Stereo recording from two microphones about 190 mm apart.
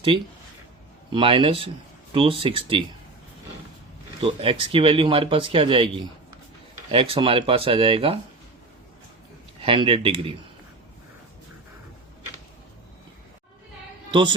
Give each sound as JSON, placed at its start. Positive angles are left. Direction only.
{"t": 1.1, "sound": "speech", "side_deg": -25}
{"t": 4.2, "sound": "speech", "side_deg": -30}
{"t": 9.6, "sound": "speech", "side_deg": -30}
{"t": 14.1, "sound": "a man's voice", "side_deg": -25}